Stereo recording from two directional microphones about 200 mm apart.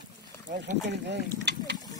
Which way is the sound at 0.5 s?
60° right (ahead or behind).